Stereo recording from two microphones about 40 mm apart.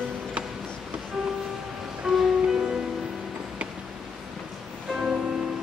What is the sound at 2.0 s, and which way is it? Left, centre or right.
Music, centre.